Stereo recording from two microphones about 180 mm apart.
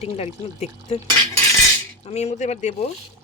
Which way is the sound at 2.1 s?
40° left (ahead or behind).